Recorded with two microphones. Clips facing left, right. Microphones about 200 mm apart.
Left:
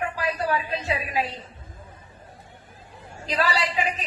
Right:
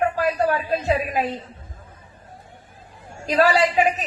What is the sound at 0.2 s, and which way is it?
A woman's voice, 45° right (ahead or behind).